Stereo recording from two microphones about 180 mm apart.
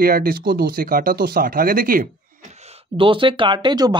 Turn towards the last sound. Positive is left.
turn(degrees=-25)  # may be behind; listen again after turning